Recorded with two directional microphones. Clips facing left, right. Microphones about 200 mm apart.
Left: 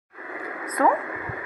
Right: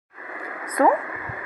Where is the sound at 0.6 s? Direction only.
10° right (ahead or behind).